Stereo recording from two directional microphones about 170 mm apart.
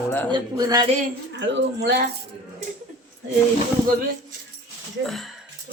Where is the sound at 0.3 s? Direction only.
25° right (ahead or behind).